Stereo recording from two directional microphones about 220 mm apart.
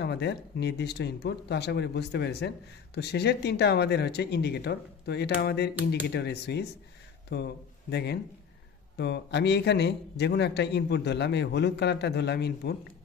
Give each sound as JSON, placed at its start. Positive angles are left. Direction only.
{"t": 0.0, "sound": "speech", "side_deg": 50}